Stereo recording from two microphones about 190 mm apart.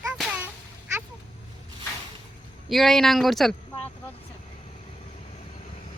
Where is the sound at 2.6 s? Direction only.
Centre (ahead or behind).